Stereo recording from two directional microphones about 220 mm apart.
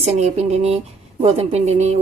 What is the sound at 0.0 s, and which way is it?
A woman's voice, 30° right (ahead or behind).